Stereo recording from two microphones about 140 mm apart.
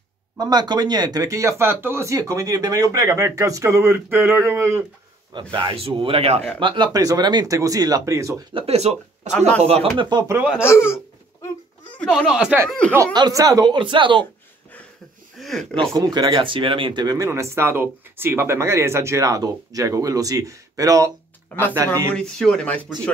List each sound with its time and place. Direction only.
0.4 s speech: 30° right (ahead or behind)
5.5 s speech: 35° right (ahead or behind)
6.6 s speech: 35° right (ahead or behind)
8.5 s speech: 50° right (ahead or behind)
9.9 s speech: 30° right (ahead or behind)
10.3 s speech: 10° right (ahead or behind)
10.6 s speech: 15° left (ahead or behind)
12.0 s speech: centre (ahead or behind)
12.6 s speech: 5° left (ahead or behind)
13.1 s speech: 25° right (ahead or behind)
15.3 s a sound: centre (ahead or behind)
16.0 s speech: 25° right (ahead or behind)
22.1 s speech: 5° left (ahead or behind)